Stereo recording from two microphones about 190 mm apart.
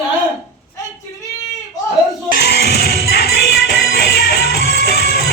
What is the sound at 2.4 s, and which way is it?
Music, 60° left (ahead or behind).